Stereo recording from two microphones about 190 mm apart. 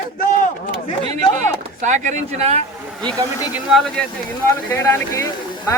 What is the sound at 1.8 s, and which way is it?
Speech, 40° right (ahead or behind).